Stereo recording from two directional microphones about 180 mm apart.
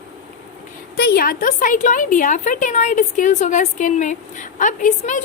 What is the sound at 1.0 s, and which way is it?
A woman's voice, 60° left (ahead or behind).